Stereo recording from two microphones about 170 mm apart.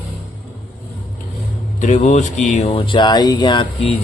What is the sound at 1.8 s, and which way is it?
Speech, 45° left (ahead or behind).